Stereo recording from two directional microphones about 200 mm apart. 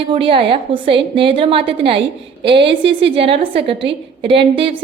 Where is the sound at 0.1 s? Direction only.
25° right (ahead or behind).